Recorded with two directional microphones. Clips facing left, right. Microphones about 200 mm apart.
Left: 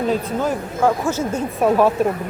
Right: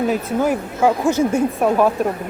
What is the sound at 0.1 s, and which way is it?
Speech, 10° right (ahead or behind).